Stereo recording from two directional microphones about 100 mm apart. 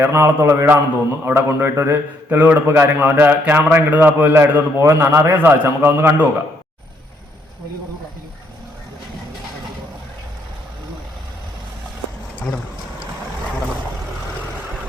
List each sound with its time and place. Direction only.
0.0 s a man's voice: 25° right (ahead or behind)